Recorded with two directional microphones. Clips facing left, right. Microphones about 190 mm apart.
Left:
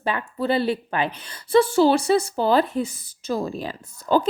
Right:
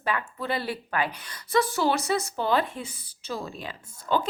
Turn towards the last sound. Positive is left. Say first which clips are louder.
# left 6 dB
turn(degrees=35)  # may be behind; listen again after turning